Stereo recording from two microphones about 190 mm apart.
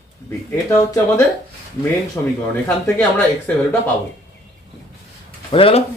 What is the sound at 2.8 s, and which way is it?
Speech, 10° left (ahead or behind).